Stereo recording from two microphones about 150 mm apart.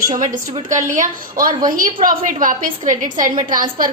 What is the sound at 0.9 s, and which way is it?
A woman's voice, 60° right (ahead or behind).